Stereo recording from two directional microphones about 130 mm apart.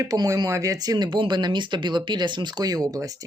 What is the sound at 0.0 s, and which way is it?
Speech, 25° right (ahead or behind).